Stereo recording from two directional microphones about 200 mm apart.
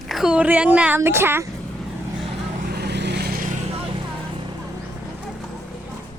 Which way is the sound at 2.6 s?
55° right (ahead or behind).